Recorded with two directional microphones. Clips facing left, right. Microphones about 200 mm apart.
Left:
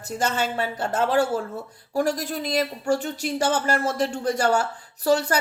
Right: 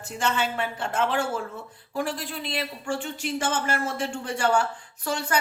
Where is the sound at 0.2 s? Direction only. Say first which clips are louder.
Left 1 dB; 40° left (ahead or behind).